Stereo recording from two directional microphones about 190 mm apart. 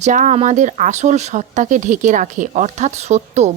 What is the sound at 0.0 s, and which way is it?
Speech, 40° right (ahead or behind).